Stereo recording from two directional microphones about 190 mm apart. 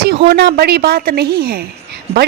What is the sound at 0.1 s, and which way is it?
Speech, 55° right (ahead or behind).